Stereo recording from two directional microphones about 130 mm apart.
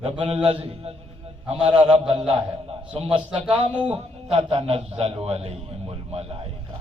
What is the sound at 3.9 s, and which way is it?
A man's voice, 50° right (ahead or behind).